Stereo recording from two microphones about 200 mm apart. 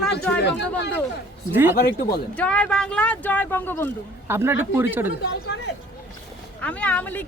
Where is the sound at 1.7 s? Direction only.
50° left (ahead or behind).